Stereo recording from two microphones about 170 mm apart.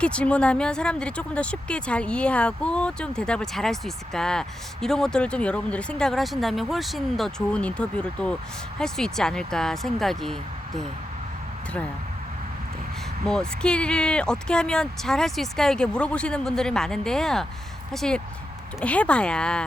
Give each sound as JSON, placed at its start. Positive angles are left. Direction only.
{"t": 0.0, "sound": "speech", "side_deg": 5}
{"t": 13.2, "sound": "speech", "side_deg": 5}